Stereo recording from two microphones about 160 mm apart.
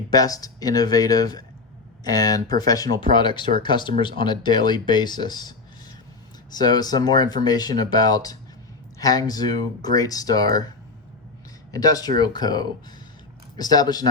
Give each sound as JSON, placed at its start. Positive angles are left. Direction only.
{"t": 0.1, "sound": "speech", "side_deg": 20}
{"t": 11.7, "sound": "speech", "side_deg": 25}